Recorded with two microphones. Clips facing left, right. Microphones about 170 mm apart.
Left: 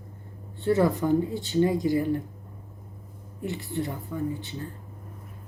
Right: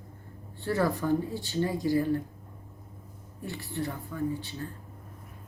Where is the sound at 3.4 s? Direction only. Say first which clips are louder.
Left 4 dB; 20° left (ahead or behind).